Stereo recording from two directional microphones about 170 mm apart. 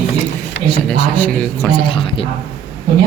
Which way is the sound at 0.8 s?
10° left (ahead or behind).